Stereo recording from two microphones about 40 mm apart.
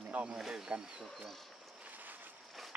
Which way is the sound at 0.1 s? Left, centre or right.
Right.